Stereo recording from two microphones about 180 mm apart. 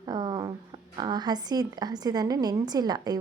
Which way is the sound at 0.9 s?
25° right (ahead or behind).